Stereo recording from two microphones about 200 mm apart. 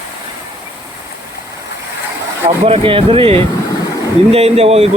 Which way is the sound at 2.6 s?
25° right (ahead or behind).